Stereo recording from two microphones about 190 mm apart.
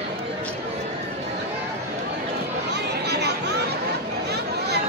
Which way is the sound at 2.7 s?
60° right (ahead or behind).